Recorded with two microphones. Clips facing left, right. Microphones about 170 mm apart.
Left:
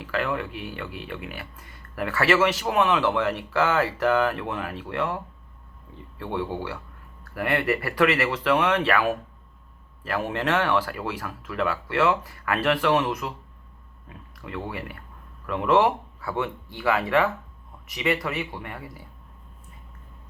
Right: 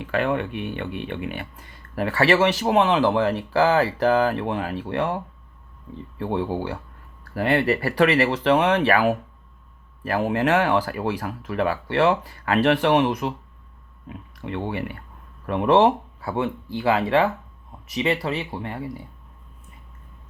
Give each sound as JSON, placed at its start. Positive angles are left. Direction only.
{"t": 0.0, "sound": "speech", "side_deg": -25}